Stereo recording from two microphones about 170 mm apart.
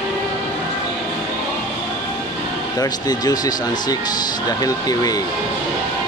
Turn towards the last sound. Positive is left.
turn(degrees=20)  # may be behind; listen again after turning